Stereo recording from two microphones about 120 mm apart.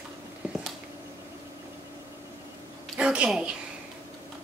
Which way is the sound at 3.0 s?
10° right (ahead or behind).